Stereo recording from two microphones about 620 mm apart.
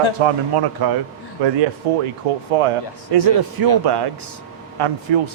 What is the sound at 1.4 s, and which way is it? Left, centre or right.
Speech, right.